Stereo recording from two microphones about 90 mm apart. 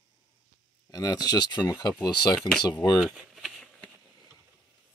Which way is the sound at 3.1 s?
5° right (ahead or behind).